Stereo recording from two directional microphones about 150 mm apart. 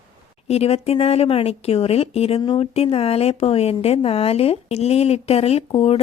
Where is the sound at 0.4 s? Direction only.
45° left (ahead or behind).